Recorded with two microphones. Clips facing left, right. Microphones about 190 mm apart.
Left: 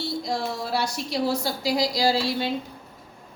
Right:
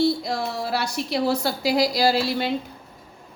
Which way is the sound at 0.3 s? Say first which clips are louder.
Right 1 dB; 60° right (ahead or behind).